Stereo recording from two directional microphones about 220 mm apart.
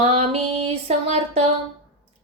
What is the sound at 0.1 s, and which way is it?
Music, 25° right (ahead or behind).